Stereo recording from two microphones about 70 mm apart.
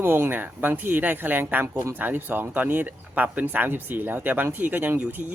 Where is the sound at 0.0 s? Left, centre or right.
Right.